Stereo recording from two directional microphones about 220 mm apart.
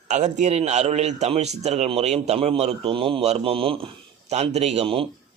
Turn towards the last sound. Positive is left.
turn(degrees=-25)  # may be behind; listen again after turning